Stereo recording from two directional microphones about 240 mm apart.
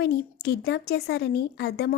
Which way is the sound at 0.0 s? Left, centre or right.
Left.